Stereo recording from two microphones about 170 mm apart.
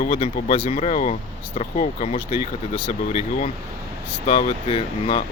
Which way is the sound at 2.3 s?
35° left (ahead or behind).